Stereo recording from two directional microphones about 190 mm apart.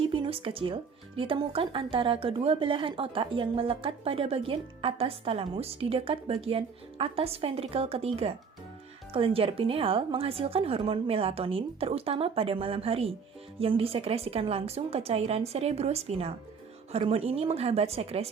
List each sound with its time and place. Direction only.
0.0 s a woman's voice: 30° right (ahead or behind)